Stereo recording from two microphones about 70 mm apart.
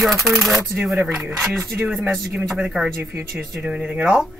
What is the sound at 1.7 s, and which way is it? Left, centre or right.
Speech, centre.